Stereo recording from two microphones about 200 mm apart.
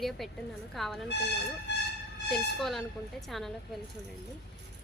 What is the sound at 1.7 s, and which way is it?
Vehicle, 60° left (ahead or behind).